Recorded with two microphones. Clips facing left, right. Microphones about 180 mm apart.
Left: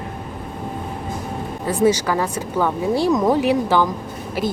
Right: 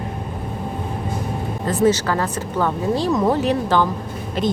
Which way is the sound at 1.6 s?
10° left (ahead or behind).